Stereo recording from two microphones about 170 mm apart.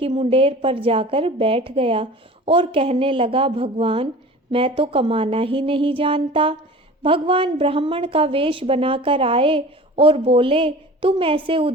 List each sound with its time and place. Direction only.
0.0 s a woman's voice: 30° right (ahead or behind)